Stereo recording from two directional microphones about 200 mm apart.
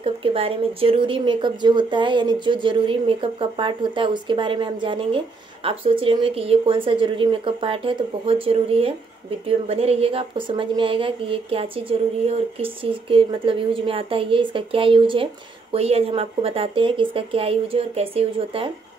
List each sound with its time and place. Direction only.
0.0 s speech: 30° right (ahead or behind)